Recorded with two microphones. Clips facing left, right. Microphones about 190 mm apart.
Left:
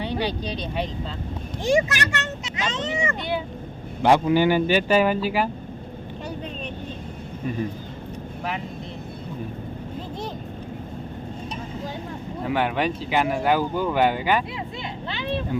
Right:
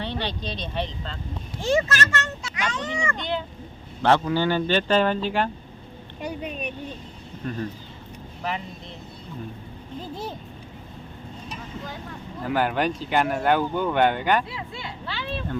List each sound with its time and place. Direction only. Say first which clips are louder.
0.0 s speech: left 4 dB; 10° left (ahead or behind)
3.2 s speech: left 2 dB; 10° left (ahead or behind)
6.2 s vehicle: right 3 dB; 15° right (ahead or behind)
7.4 s speech: left 2 dB; 5° left (ahead or behind)
12.4 s speech: even; centre (ahead or behind)
14.5 s speech: left 3 dB; 20° left (ahead or behind)